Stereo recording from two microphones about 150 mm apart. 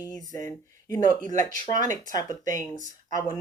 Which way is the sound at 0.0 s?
25° left (ahead or behind).